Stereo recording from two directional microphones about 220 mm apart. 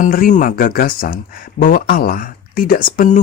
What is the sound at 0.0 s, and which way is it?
Speech, 35° left (ahead or behind).